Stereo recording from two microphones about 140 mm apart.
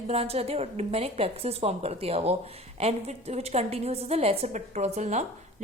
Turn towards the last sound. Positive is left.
turn(degrees=-55)  # may be behind; listen again after turning